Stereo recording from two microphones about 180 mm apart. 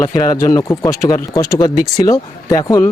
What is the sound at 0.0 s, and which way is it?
Speech, 20° left (ahead or behind).